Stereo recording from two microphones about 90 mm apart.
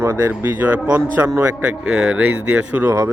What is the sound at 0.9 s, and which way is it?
Speech, 30° right (ahead or behind).